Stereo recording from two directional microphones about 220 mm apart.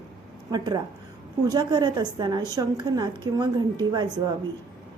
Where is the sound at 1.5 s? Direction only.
20° right (ahead or behind).